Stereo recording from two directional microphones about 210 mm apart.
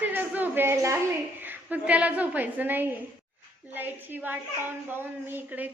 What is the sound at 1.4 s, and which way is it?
A woman's voice, 10° right (ahead or behind).